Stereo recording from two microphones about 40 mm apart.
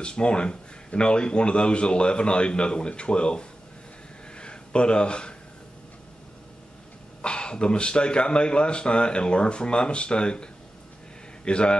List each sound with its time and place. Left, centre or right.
0.0 s speech: left
4.4 s a sound: left
7.2 s speech: left